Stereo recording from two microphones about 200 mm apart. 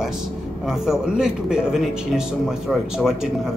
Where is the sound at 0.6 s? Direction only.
5° right (ahead or behind).